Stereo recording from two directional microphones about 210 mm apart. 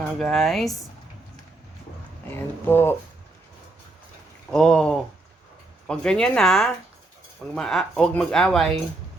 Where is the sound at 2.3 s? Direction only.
10° left (ahead or behind).